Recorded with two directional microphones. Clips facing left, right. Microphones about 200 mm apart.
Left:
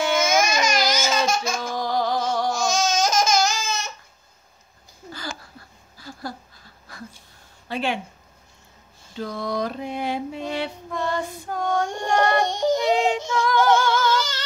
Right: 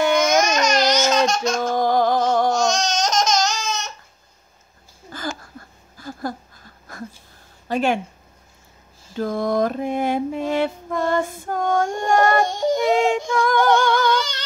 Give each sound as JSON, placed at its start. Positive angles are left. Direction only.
{"t": 0.3, "sound": "babbling", "side_deg": 5}
{"t": 1.6, "sound": "music", "side_deg": -50}
{"t": 2.5, "sound": "babbling", "side_deg": 5}
{"t": 5.1, "sound": "a sound", "side_deg": -50}
{"t": 7.6, "sound": "speech", "side_deg": -45}
{"t": 9.1, "sound": "mantra", "side_deg": -50}
{"t": 11.9, "sound": "music", "side_deg": 0}
{"t": 12.9, "sound": "music", "side_deg": -50}
{"t": 13.7, "sound": "singing", "side_deg": 5}